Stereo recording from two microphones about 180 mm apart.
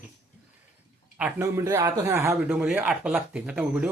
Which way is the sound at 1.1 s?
10° right (ahead or behind).